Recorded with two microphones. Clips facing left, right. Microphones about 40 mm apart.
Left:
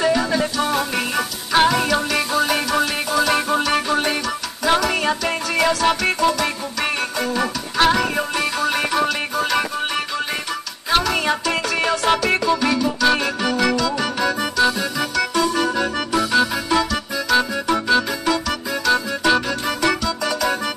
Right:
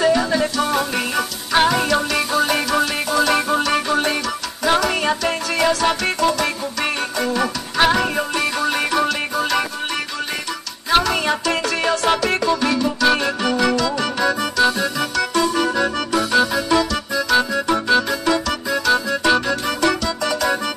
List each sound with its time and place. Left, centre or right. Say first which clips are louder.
0.0 s music: right 2 dB; centre
10.9 s music: right 1 dB; centre
16.5 s organ: right 2 dB; centre
17.3 s music: even; centre
18.7 s music: right 2 dB; centre